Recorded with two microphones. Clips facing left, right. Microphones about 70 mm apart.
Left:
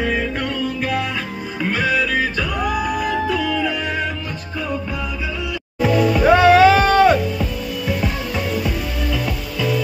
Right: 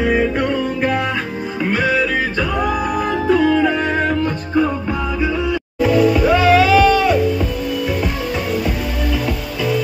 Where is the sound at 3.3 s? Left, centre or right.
Right.